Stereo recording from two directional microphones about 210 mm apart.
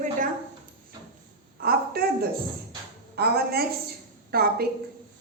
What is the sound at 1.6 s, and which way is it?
A woman's voice, 45° right (ahead or behind).